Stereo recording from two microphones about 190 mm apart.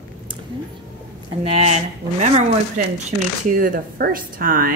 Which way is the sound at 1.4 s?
35° right (ahead or behind).